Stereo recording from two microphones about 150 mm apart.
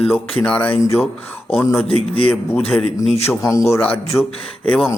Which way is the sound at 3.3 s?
25° left (ahead or behind).